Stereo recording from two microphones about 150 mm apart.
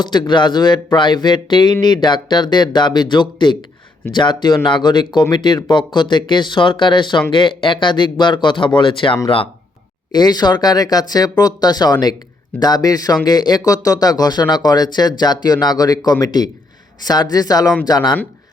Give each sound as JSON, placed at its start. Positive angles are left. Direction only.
{"t": 0.0, "sound": "speech", "side_deg": 30}